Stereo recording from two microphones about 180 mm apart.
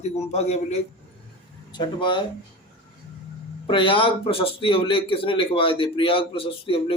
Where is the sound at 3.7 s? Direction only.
30° left (ahead or behind).